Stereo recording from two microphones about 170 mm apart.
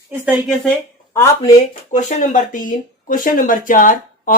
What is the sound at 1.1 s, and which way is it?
Speech, 15° left (ahead or behind).